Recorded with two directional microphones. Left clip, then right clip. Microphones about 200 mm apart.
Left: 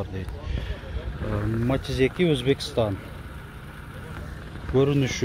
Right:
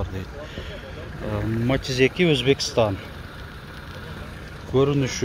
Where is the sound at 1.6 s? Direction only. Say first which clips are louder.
Right 4 dB; 25° right (ahead or behind).